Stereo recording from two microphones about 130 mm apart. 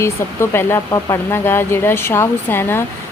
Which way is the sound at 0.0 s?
20° left (ahead or behind).